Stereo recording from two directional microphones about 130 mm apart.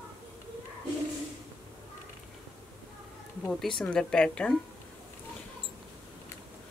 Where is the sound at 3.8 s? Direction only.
5° left (ahead or behind).